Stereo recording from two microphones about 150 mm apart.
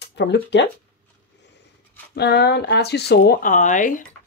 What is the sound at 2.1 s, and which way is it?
Speech, 90° left.